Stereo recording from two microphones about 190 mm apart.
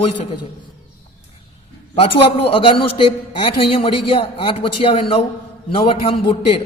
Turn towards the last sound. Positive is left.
turn(degrees=30)  # may be behind; listen again after turning